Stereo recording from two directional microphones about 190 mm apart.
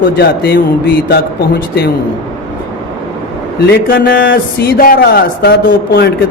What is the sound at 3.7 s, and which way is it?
A man's voice, 55° left (ahead or behind).